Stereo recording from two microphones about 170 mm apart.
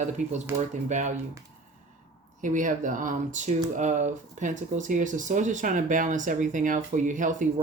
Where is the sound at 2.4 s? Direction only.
50° right (ahead or behind).